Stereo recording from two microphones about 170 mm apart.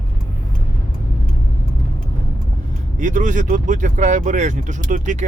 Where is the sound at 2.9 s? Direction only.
45° right (ahead or behind).